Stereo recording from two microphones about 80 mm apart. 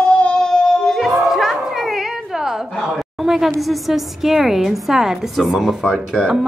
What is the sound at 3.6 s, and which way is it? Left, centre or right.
A woman's voice, centre.